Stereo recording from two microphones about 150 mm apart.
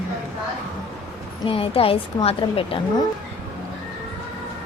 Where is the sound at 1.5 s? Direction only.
40° left (ahead or behind).